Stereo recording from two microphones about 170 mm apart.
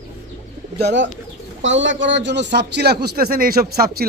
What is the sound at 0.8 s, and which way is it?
A man's voice, 90° right.